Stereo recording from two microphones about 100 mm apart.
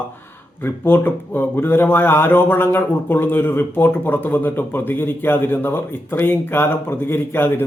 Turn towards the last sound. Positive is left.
turn(degrees=20)  # may be behind; listen again after turning